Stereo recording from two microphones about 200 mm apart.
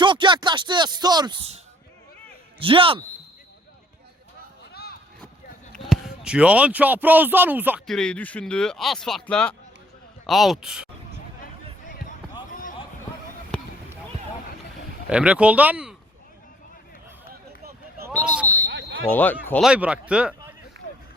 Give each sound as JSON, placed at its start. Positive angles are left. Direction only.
{"t": 0.0, "sound": "speech", "side_deg": -25}
{"t": 4.7, "sound": "a sound", "side_deg": 50}
{"t": 5.7, "sound": "speech", "side_deg": 0}
{"t": 7.9, "sound": "speech", "side_deg": 5}
{"t": 15.1, "sound": "speech", "side_deg": -5}
{"t": 18.7, "sound": "smoke detector", "side_deg": -70}
{"t": 19.1, "sound": "speech", "side_deg": 10}
{"t": 19.6, "sound": "speech", "side_deg": -5}